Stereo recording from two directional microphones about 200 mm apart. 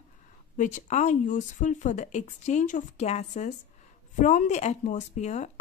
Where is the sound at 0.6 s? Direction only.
35° left (ahead or behind).